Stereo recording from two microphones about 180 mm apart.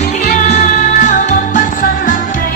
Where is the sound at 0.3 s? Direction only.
40° left (ahead or behind).